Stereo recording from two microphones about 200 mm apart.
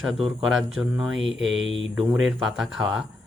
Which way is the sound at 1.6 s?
30° left (ahead or behind).